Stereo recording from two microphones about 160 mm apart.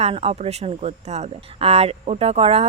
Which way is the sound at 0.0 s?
40° right (ahead or behind).